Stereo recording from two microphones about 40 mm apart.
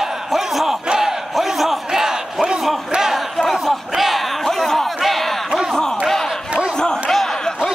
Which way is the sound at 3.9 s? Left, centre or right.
Centre.